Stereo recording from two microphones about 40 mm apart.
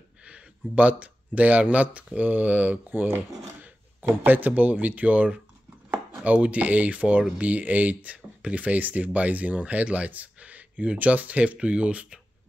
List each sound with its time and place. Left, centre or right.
0.2 s a sound: right
1.6 s speech: right
4.3 s speech: right
5.9 s chopping: right
7.3 s speech: right